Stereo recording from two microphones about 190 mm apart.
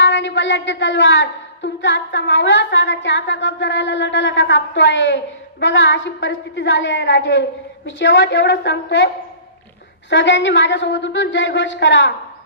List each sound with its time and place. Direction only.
0.0 s a woman's voice: 70° left (ahead or behind)
10.1 s a woman's voice: 70° left (ahead or behind)